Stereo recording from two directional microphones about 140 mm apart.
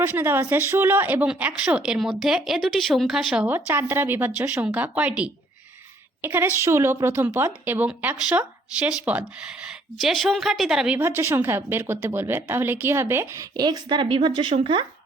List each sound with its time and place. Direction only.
0.0 s a woman's voice: 15° right (ahead or behind); by 14.8 s 35° right (ahead or behind)